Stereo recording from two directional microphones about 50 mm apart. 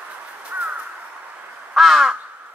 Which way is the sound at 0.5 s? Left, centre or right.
Right.